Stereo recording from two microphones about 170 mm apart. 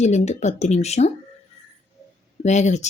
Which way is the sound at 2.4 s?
45° left (ahead or behind).